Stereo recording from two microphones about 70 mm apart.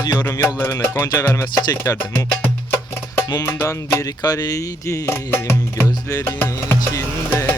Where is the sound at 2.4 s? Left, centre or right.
Left.